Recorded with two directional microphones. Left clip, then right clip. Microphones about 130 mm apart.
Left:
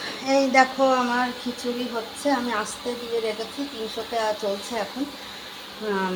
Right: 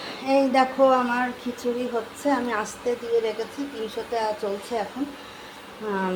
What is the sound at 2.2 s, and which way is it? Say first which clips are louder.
Speech: left 1 dB; centre (ahead or behind).